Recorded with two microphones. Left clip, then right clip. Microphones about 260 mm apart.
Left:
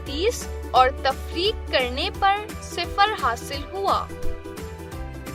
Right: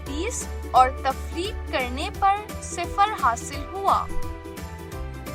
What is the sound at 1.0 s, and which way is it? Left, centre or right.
Speech, centre.